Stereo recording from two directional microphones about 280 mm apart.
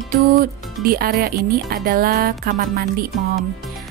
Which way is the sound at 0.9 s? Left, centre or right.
Right.